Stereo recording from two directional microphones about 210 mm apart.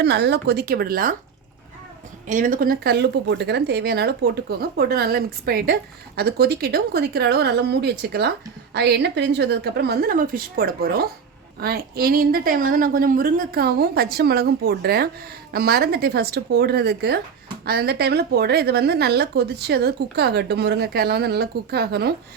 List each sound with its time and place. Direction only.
0.0 s speech: 55° right (ahead or behind)
2.2 s speech: 40° right (ahead or behind)